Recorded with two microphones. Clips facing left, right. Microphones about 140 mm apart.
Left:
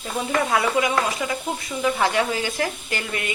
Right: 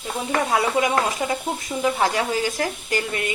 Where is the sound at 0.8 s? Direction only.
40° right (ahead or behind).